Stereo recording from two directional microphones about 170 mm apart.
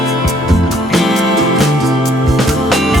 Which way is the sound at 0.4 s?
Centre (ahead or behind).